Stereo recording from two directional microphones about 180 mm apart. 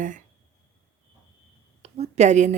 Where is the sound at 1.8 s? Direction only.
35° right (ahead or behind).